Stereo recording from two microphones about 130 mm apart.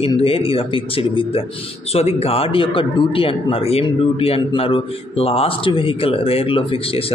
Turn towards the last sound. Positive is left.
turn(degrees=45)  # may be behind; listen again after turning